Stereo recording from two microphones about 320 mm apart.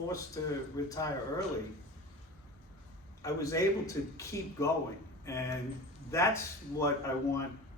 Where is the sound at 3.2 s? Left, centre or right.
Centre.